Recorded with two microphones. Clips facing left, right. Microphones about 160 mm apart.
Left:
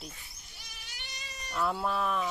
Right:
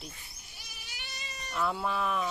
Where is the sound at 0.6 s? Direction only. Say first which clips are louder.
Right 1 dB; 5° right (ahead or behind).